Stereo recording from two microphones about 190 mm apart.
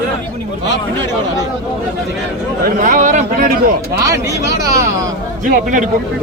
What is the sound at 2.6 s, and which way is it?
A man's voice, 45° right (ahead or behind).